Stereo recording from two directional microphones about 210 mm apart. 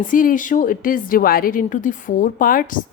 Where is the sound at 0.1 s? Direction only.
40° left (ahead or behind).